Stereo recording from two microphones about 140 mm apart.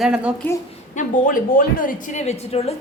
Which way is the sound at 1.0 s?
75° left (ahead or behind).